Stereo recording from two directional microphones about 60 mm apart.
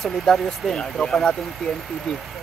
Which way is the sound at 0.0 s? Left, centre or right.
Centre.